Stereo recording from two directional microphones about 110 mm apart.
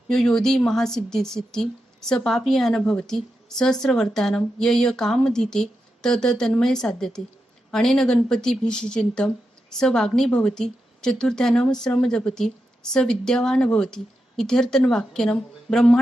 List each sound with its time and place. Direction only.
0.1 s a woman's voice: 5° left (ahead or behind)